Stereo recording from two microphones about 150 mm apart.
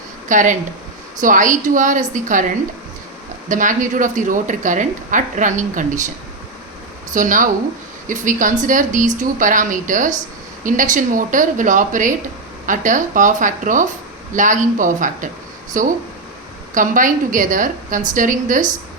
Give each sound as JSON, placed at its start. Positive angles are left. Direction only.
{"t": 0.3, "sound": "speech", "side_deg": -60}
{"t": 3.5, "sound": "speech", "side_deg": -60}
{"t": 7.1, "sound": "speech", "side_deg": -60}